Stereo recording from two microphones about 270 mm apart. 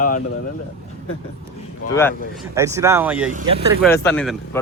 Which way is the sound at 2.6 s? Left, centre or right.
Centre.